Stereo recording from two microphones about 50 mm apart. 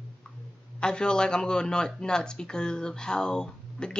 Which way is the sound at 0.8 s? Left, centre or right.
Centre.